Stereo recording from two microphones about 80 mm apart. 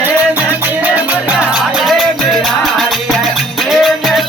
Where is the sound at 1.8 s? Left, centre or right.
Centre.